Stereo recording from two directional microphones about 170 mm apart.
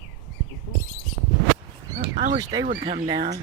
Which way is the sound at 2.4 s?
20° right (ahead or behind).